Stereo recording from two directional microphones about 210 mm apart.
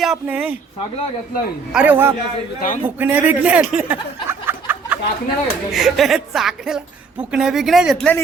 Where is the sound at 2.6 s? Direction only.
40° left (ahead or behind).